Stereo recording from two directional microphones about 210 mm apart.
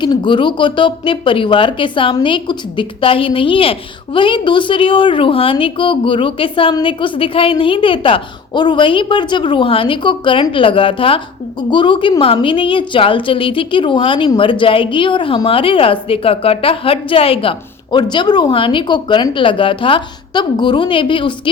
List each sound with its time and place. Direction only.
0.0 s speech: 20° left (ahead or behind)